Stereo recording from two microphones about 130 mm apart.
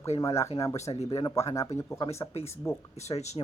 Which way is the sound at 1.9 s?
50° left (ahead or behind).